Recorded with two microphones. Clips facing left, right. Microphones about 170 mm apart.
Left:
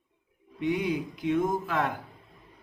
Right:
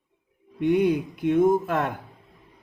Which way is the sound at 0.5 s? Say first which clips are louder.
Right 7 dB; 55° right (ahead or behind).